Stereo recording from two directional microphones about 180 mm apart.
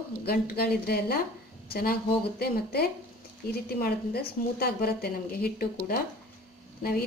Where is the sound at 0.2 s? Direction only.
60° left (ahead or behind).